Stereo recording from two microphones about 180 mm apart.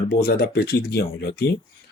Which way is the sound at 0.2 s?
65° left (ahead or behind).